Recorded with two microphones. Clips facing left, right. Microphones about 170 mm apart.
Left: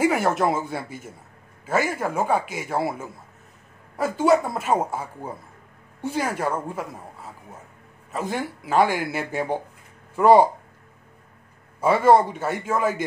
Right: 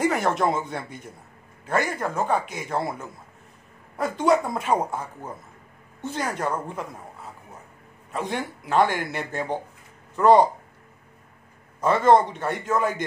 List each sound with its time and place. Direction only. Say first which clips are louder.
0.0 s a man's voice: left 2 dB; 5° left (ahead or behind)
8.1 s a man's voice: left 1 dB; centre (ahead or behind)
11.8 s a man's voice: left 1 dB; 10° left (ahead or behind)